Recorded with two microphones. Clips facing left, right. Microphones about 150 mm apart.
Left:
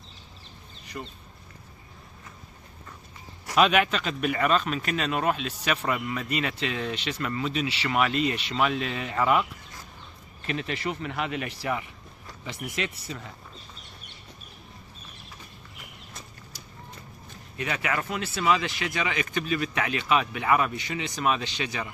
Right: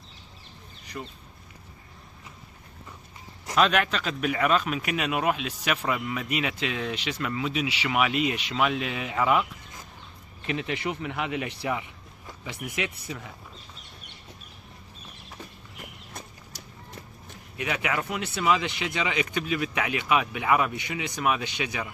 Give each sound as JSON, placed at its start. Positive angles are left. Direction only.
{"t": 1.0, "sound": "speech", "side_deg": 5}
{"t": 3.5, "sound": "speech", "side_deg": 5}
{"t": 10.4, "sound": "speech", "side_deg": -15}
{"t": 17.6, "sound": "speech", "side_deg": -10}